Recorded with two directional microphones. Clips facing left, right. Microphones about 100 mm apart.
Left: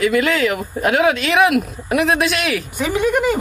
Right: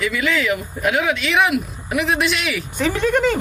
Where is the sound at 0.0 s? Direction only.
55° left (ahead or behind).